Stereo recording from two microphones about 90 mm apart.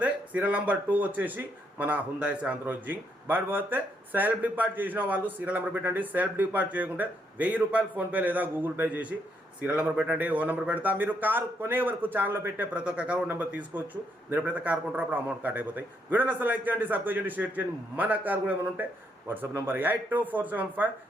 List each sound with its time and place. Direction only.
0.0 s speech: 15° right (ahead or behind)
12.7 s speech: 15° right (ahead or behind)